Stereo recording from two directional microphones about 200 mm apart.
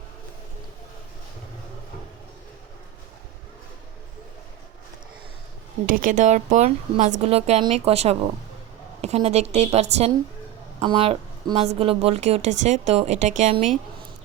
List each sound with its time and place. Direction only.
5.8 s speech: 40° right (ahead or behind)